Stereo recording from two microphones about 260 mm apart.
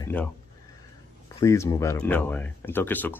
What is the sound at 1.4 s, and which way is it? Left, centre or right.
Speech, centre.